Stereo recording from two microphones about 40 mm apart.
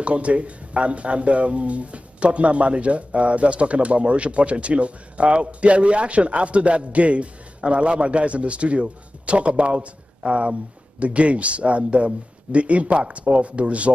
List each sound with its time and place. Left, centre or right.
0.0 s speech: right